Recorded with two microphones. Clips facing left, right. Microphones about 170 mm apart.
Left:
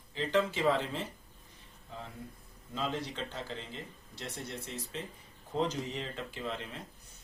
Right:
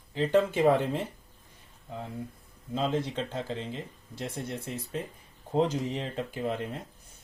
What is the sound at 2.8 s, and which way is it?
Speech, 45° right (ahead or behind).